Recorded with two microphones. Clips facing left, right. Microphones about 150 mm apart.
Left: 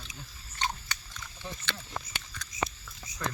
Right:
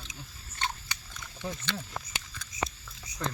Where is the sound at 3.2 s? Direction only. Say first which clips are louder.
Right 1 dB; 30° right (ahead or behind).